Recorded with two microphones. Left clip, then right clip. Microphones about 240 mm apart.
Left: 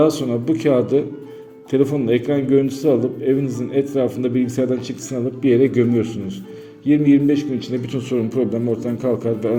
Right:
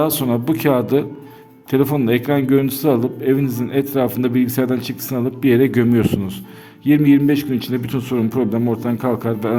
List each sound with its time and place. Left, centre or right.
0.0 s a man's voice: right